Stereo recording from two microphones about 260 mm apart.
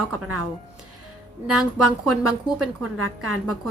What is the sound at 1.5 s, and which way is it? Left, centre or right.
A woman's voice, right.